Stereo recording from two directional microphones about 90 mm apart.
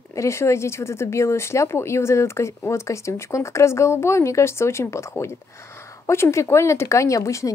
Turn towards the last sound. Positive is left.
turn(degrees=35)  # may be behind; listen again after turning